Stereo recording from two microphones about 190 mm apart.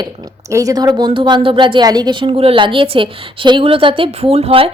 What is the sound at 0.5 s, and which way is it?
A woman's voice, 20° right (ahead or behind).